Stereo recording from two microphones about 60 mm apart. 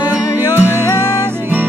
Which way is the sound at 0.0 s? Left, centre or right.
Right.